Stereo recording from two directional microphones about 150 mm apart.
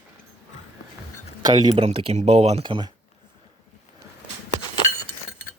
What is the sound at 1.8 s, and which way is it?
Speech, 40° right (ahead or behind).